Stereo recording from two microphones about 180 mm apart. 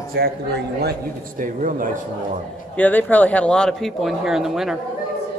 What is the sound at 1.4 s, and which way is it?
Speech, 50° right (ahead or behind).